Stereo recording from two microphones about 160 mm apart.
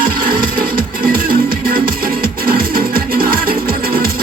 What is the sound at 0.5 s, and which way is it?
Music, 65° right (ahead or behind).